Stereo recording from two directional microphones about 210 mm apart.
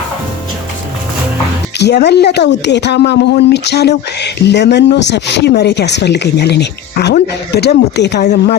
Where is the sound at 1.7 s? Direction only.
55° left (ahead or behind).